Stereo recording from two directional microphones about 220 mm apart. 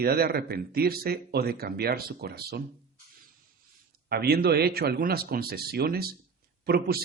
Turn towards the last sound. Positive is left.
turn(degrees=-45)  # may be behind; listen again after turning